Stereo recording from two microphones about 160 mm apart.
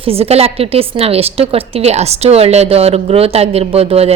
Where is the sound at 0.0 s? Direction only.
40° right (ahead or behind).